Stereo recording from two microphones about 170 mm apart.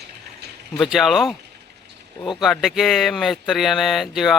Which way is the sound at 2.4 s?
Centre (ahead or behind).